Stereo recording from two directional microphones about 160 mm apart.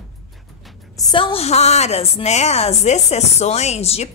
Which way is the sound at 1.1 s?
35° left (ahead or behind).